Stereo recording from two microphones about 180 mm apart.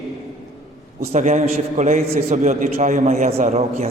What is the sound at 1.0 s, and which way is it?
A man's voice, 45° right (ahead or behind).